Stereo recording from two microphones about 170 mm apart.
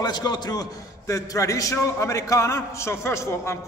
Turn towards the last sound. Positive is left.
turn(degrees=15)  # may be behind; listen again after turning